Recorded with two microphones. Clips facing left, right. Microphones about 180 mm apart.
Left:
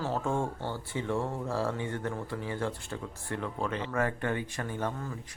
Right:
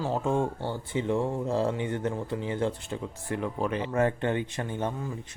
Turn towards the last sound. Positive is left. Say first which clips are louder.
# right 3 dB
turn(degrees=-15)  # may be behind; listen again after turning